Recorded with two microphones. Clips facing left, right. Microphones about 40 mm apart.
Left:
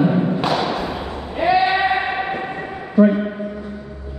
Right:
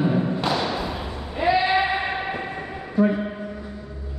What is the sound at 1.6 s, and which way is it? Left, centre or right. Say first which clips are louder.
Basketball bounce: left 4 dB; left.